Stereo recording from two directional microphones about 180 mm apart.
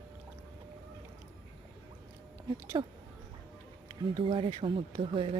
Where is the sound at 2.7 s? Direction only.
25° right (ahead or behind).